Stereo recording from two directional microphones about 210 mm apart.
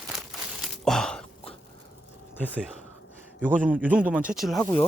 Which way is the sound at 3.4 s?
10° right (ahead or behind).